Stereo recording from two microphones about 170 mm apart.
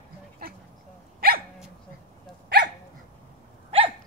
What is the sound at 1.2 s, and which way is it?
Dog, 65° right (ahead or behind).